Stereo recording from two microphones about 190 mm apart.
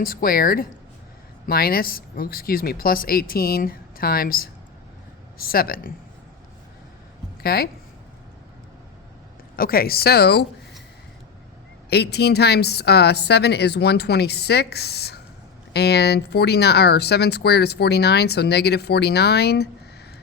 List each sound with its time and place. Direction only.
0.0 s speech: 50° left (ahead or behind)
7.4 s speech: 55° left (ahead or behind)
9.6 s speech: 50° left (ahead or behind)
11.9 s speech: 60° left (ahead or behind)